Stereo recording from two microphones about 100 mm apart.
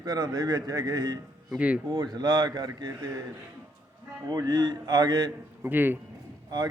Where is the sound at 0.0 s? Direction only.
40° right (ahead or behind).